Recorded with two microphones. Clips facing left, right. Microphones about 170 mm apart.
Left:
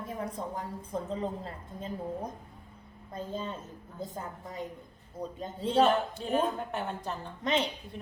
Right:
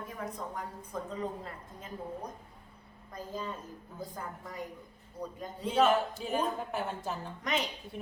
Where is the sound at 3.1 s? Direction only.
25° left (ahead or behind).